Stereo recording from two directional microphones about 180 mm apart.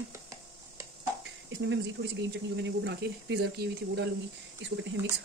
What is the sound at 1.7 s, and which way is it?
Speech, 80° right.